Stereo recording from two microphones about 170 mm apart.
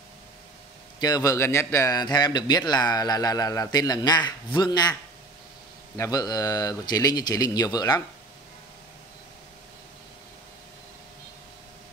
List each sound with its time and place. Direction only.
0.9 s a man's voice: 25° left (ahead or behind)
5.9 s a man's voice: 20° left (ahead or behind)